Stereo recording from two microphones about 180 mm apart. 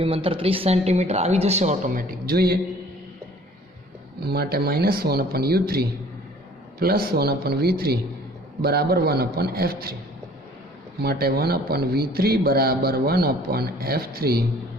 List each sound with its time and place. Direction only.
0.0 s speech: 30° right (ahead or behind); by 2.6 s 60° right (ahead or behind)
4.2 s a man's voice: 60° right (ahead or behind)
11.0 s a man's voice: 60° right (ahead or behind)